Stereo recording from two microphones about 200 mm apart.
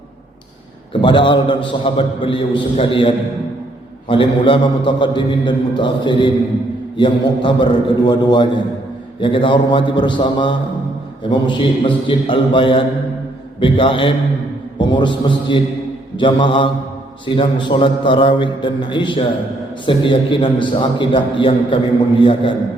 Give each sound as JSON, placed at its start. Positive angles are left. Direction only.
{"t": 1.0, "sound": "a man's voice", "side_deg": 25}
{"t": 4.1, "sound": "a man's voice", "side_deg": 25}